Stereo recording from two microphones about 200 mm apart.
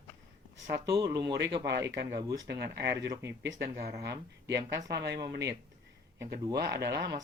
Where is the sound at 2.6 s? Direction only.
55° right (ahead or behind).